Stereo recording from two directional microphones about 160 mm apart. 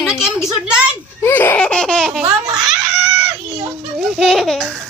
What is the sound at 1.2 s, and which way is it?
Speech, 15° left (ahead or behind).